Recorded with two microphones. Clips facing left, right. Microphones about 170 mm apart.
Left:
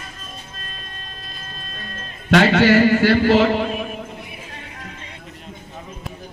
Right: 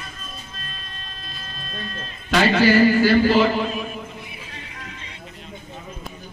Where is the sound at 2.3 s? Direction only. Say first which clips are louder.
Left 3 dB; 75° left (ahead or behind).